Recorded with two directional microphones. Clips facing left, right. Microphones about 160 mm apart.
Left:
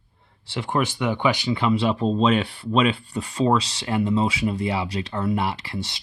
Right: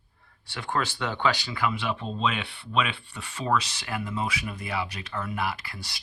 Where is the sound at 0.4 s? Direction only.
20° left (ahead or behind).